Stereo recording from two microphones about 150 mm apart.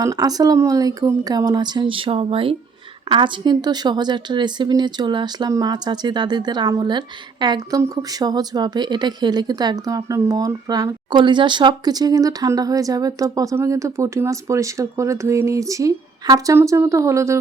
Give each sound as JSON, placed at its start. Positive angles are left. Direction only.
{"t": 0.0, "sound": "a woman's voice", "side_deg": -25}